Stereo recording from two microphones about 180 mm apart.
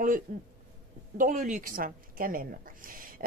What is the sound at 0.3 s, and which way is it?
A woman's voice, 50° right (ahead or behind).